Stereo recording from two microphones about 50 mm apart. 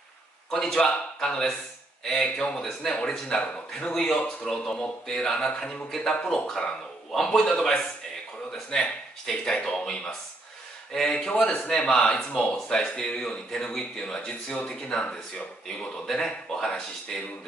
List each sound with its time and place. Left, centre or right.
0.5 s a man's voice: centre
5.9 s speech: centre
15.0 s speech: left
16.1 s speech: centre